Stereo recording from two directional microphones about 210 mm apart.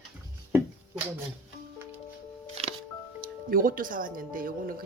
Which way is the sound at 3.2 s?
40° right (ahead or behind).